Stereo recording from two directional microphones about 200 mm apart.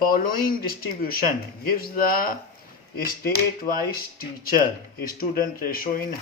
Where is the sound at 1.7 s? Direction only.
45° left (ahead or behind).